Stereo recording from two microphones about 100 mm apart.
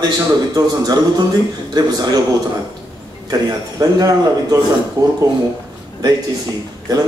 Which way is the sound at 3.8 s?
35° right (ahead or behind).